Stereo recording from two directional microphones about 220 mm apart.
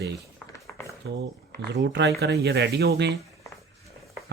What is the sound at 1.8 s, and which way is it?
Speech, 50° right (ahead or behind).